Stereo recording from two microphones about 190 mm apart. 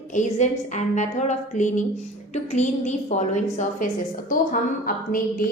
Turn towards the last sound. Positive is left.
turn(degrees=45)  # may be behind; listen again after turning